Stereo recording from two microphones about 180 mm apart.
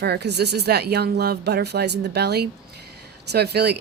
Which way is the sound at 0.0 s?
65° right (ahead or behind).